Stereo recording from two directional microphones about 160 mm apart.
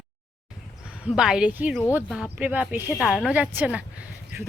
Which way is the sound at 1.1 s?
5° right (ahead or behind).